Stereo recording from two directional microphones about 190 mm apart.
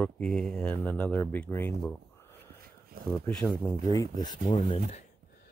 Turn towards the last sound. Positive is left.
turn(degrees=30)  # may be behind; listen again after turning